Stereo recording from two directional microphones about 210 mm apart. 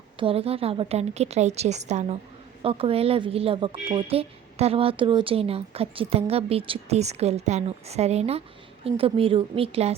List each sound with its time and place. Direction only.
0.2 s a woman's voice: 25° right (ahead or behind)